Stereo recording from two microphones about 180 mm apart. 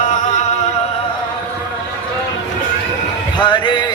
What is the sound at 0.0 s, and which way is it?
Music, 45° left (ahead or behind).